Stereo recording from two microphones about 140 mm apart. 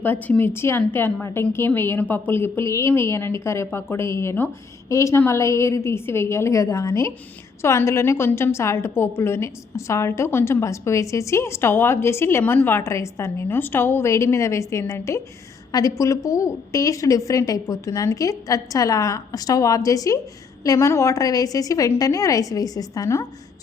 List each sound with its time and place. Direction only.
0.0 s a woman's voice: 15° left (ahead or behind)